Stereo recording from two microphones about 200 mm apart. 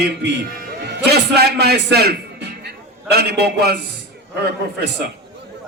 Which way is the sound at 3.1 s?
55° right (ahead or behind).